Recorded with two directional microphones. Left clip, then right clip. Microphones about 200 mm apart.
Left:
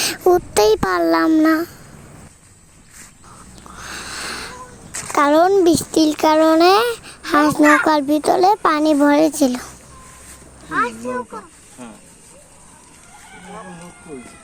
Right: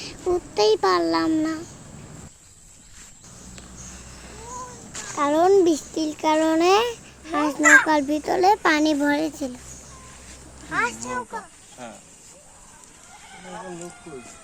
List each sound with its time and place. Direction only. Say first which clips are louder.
0.0 s a child's voice: left 10 dB; 65° left (ahead or behind)
3.9 s a sound: left 15 dB; 50° left (ahead or behind)
4.9 s a child's voice: left 8 dB; 60° left (ahead or behind)
10.7 s speech: left 4 dB; 5° right (ahead or behind)